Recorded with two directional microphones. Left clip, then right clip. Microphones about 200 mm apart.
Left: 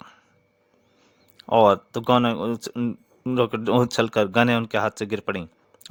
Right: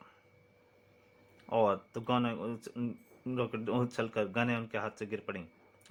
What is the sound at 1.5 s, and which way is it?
Speech, 60° left (ahead or behind).